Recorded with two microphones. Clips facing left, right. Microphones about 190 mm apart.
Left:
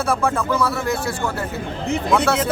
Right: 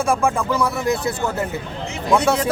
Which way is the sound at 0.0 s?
10° right (ahead or behind).